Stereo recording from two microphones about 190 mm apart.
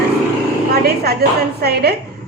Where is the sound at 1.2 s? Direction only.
55° right (ahead or behind).